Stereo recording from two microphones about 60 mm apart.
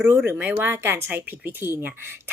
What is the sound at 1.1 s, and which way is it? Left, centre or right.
A woman's voice, right.